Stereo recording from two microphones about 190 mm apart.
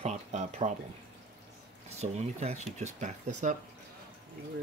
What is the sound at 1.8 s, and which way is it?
Speech, 35° right (ahead or behind).